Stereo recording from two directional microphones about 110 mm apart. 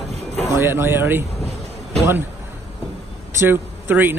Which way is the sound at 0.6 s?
20° right (ahead or behind).